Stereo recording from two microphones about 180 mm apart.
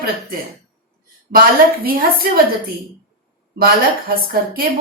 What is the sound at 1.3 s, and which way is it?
A woman's voice, 55° right (ahead or behind).